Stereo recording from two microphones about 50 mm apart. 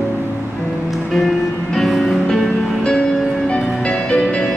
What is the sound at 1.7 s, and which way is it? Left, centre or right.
Music, centre.